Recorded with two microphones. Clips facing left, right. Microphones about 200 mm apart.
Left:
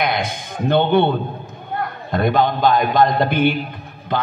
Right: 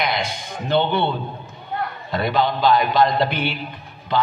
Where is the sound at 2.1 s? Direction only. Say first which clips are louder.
Left 3 dB; 50° left (ahead or behind).